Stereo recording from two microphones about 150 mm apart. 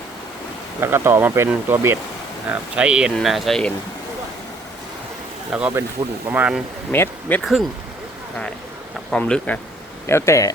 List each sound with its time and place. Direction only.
0.8 s speech: 15° right (ahead or behind); by 3.7 s centre (ahead or behind)
5.5 s speech: 10° right (ahead or behind)
6.9 s speech: 15° left (ahead or behind)
7.4 s speech: centre (ahead or behind)
9.0 s speech: 5° left (ahead or behind)
10.1 s speech: 20° left (ahead or behind)